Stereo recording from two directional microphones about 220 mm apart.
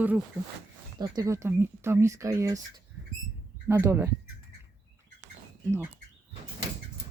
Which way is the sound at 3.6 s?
10° right (ahead or behind).